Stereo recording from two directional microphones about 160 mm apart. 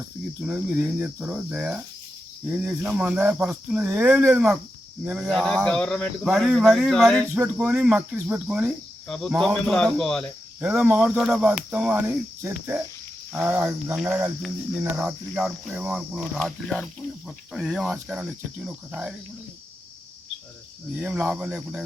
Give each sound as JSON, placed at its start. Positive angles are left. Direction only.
{"t": 0.4, "sound": "speech", "side_deg": -10}
{"t": 7.3, "sound": "speech", "side_deg": -10}
{"t": 9.0, "sound": "speech", "side_deg": 5}
{"t": 10.6, "sound": "speech", "side_deg": -10}
{"t": 21.0, "sound": "speech", "side_deg": -10}